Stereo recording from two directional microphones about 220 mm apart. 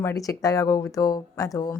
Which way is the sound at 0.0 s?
15° left (ahead or behind).